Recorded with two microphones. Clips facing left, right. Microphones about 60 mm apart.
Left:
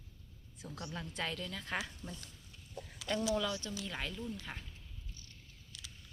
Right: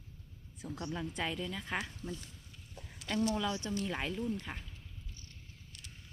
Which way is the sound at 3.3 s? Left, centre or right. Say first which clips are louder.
Right 1 dB; right.